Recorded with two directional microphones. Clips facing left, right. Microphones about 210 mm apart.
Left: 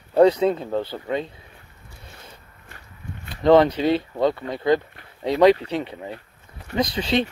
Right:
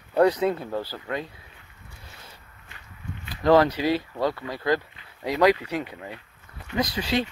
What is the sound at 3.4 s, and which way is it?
Speech, 25° left (ahead or behind).